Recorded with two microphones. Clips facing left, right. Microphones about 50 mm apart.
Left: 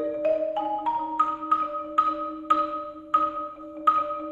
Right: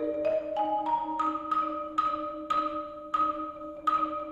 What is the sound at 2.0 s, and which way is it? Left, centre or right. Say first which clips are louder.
Music: left 6 dB; left.